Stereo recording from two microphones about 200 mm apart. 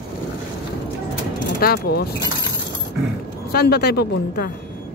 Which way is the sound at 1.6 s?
50° left (ahead or behind).